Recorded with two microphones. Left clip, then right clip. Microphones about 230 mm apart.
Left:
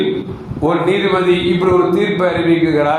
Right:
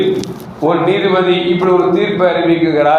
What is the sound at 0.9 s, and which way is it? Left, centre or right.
Speech, left.